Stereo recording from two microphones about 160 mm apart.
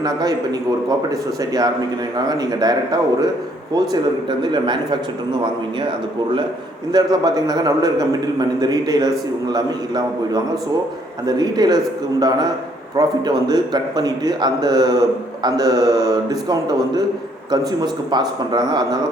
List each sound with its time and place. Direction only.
0.0 s a man's voice: 25° right (ahead or behind)
6.9 s a man's voice: 25° right (ahead or behind)
13.0 s a man's voice: 25° right (ahead or behind)